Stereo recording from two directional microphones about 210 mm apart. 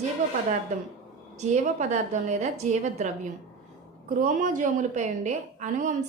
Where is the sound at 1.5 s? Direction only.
35° right (ahead or behind).